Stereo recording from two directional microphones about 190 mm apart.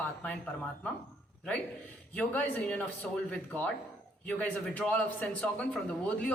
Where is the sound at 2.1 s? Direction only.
10° left (ahead or behind).